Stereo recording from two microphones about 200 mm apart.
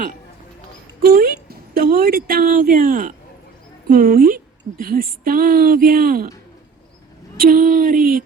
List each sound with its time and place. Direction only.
1.0 s speech: 50° right (ahead or behind)
7.3 s speech: 45° right (ahead or behind)